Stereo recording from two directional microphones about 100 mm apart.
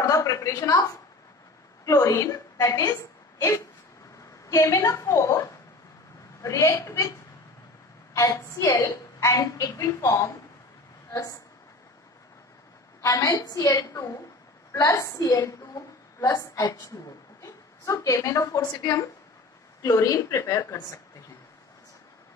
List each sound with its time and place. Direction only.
0.0 s a woman's voice: 35° left (ahead or behind)
1.9 s a woman's voice: 30° left (ahead or behind)
13.0 s a woman's voice: 35° left (ahead or behind)